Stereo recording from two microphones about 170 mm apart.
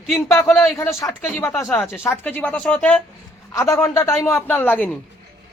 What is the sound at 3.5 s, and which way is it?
Speech, 15° left (ahead or behind).